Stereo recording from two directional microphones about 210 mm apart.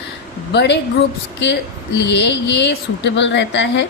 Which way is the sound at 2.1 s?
55° left (ahead or behind).